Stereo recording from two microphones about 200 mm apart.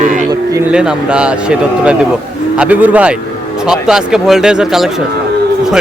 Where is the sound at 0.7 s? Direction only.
5° right (ahead or behind).